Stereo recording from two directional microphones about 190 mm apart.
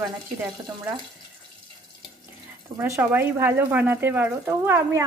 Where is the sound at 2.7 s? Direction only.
15° right (ahead or behind).